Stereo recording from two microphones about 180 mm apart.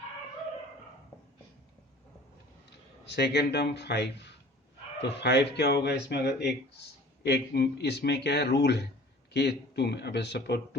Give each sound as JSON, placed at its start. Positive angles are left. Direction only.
{"t": 3.1, "sound": "speech", "side_deg": 65}